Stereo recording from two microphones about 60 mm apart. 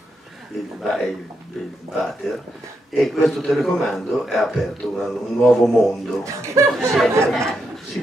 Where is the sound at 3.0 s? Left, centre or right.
Centre.